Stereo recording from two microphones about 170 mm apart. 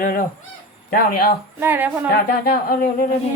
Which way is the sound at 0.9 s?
60° left (ahead or behind).